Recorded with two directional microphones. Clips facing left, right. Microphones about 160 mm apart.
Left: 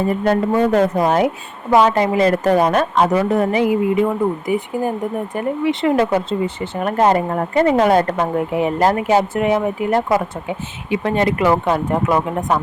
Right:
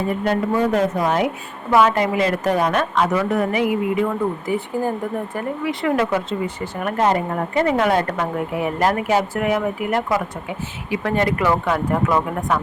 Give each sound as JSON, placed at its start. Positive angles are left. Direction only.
{"t": 0.5, "sound": "a woman's voice", "side_deg": 30}